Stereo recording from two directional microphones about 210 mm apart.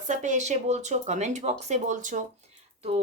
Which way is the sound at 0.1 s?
35° right (ahead or behind).